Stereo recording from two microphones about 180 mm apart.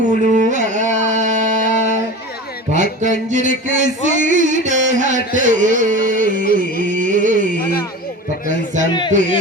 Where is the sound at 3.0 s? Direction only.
40° right (ahead or behind).